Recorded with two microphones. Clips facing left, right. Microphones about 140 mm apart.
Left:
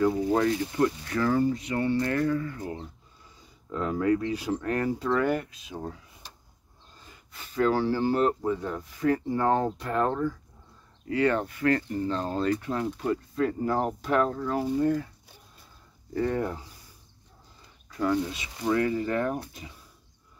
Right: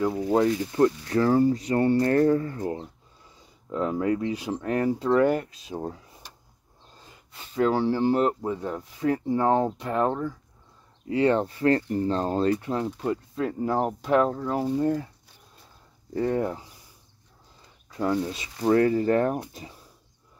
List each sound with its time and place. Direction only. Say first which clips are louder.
0.3 s speech: right 2 dB; 25° right (ahead or behind)
3.7 s speech: even; 20° right (ahead or behind)
7.1 s speech: even; 25° right (ahead or behind)
12.6 s speech: right 1 dB; 25° right (ahead or behind)
16.1 s speech: right 2 dB; 20° right (ahead or behind)
18.3 s speech: right 5 dB; 35° right (ahead or behind)